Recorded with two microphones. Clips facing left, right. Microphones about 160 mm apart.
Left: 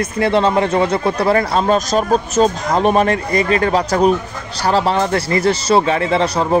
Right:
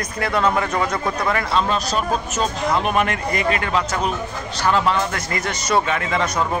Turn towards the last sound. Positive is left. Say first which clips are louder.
# left 5 dB
turn(degrees=30)  # may be behind; listen again after turning